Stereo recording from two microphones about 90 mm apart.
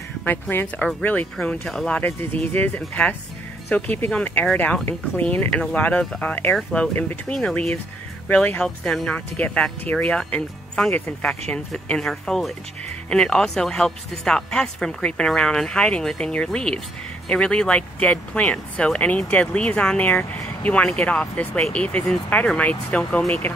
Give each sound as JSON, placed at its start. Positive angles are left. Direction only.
{"t": 0.2, "sound": "speech", "side_deg": 20}
{"t": 2.0, "sound": "speech", "side_deg": 20}